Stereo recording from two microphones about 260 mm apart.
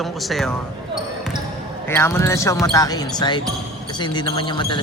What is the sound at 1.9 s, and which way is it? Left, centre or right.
Speech, centre.